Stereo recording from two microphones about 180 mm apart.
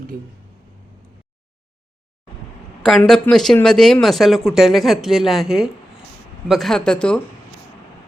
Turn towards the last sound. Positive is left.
turn(degrees=5)  # may be behind; listen again after turning